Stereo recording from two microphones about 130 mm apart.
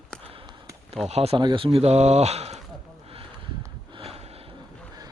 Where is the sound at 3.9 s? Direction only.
50° right (ahead or behind).